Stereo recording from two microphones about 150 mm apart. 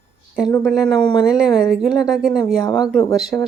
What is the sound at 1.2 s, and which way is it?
A woman's voice, 5° right (ahead or behind).